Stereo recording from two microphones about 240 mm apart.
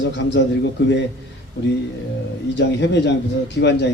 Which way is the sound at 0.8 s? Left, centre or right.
Left.